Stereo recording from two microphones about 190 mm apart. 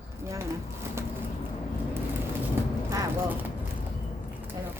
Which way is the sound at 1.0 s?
15° right (ahead or behind).